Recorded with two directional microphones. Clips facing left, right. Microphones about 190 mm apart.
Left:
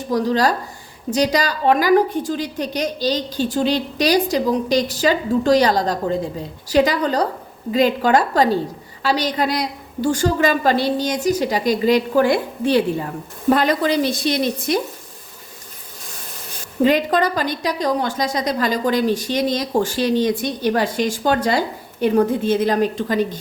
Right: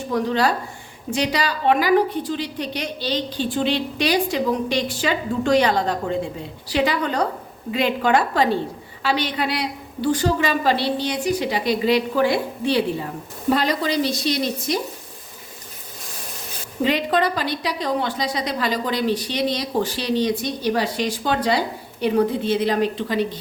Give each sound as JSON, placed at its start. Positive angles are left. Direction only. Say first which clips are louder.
{"t": 0.1, "sound": "a woman's voice", "louder": "left 3 dB", "side_deg": 40}
{"t": 16.8, "sound": "a woman's voice", "louder": "left 4 dB", "side_deg": 45}